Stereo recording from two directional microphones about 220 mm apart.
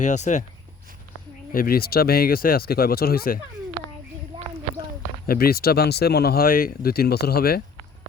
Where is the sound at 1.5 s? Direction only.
40° left (ahead or behind).